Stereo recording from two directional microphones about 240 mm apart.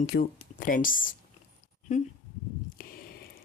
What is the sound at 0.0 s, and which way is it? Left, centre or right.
Speech, left.